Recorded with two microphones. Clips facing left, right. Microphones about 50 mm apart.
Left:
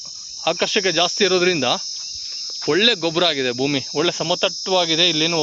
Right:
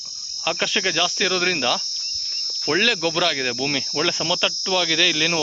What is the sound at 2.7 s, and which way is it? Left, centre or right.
Cricket, right.